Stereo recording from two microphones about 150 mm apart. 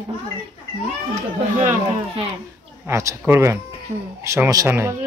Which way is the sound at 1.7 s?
40° right (ahead or behind).